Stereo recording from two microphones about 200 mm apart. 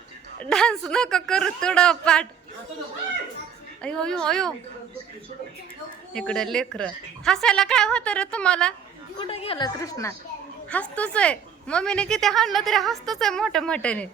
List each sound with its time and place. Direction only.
0.4 s a woman's voice: 5° left (ahead or behind)
3.8 s a woman's voice: 5° left (ahead or behind)
6.1 s a woman's voice: 5° left (ahead or behind)
9.1 s a woman's voice: 30° left (ahead or behind); by 14.1 s 5° left (ahead or behind)